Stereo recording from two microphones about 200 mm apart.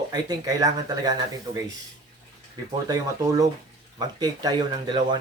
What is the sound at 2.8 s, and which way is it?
Speech, 20° right (ahead or behind).